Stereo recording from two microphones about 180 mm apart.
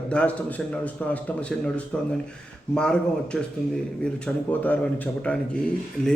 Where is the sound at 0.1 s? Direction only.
5° left (ahead or behind).